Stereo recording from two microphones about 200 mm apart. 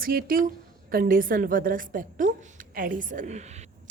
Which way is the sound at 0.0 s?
45° right (ahead or behind).